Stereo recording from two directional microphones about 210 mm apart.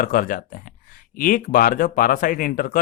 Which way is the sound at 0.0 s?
40° left (ahead or behind).